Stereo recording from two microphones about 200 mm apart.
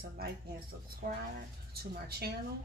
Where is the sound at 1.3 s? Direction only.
50° right (ahead or behind).